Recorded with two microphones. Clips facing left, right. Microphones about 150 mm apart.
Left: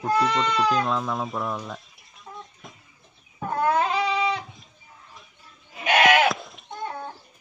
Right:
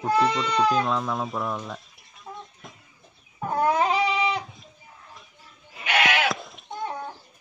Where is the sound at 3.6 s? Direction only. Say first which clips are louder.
Right 1 dB; 15° right (ahead or behind).